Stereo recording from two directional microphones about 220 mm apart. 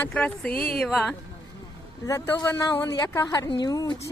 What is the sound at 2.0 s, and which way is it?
A woman's voice, 15° left (ahead or behind).